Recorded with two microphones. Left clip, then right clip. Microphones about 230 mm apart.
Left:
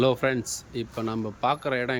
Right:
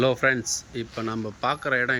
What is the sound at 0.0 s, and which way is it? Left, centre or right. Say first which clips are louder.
Speech: right 2 dB; centre.